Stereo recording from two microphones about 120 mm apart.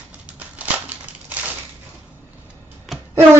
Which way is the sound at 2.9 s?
Centre (ahead or behind).